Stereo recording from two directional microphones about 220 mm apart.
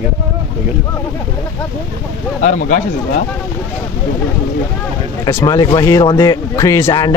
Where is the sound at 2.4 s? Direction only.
35° left (ahead or behind).